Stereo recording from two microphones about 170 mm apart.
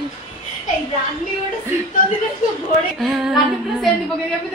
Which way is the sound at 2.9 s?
5° right (ahead or behind).